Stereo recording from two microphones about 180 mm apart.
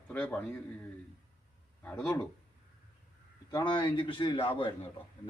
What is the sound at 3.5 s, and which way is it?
A man's voice, 25° left (ahead or behind).